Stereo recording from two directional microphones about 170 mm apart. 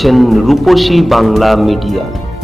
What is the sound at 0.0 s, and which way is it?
Speech, centre (ahead or behind).